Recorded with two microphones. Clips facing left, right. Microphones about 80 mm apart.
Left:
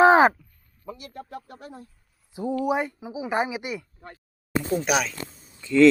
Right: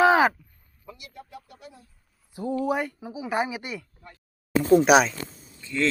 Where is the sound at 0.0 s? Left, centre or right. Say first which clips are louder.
Left 3 dB; left.